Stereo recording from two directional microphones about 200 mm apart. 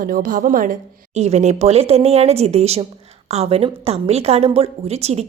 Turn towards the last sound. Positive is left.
turn(degrees=-30)  # may be behind; listen again after turning